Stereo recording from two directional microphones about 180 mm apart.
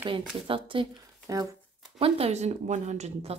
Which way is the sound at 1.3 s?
20° right (ahead or behind).